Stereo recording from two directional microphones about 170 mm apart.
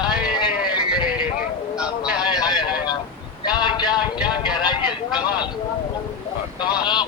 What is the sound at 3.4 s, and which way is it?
A man's voice, 25° left (ahead or behind).